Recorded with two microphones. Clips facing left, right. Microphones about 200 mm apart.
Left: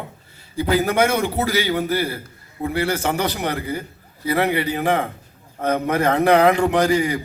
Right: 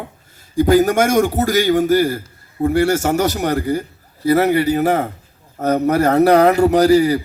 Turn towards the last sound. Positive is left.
turn(degrees=-40)  # may be behind; listen again after turning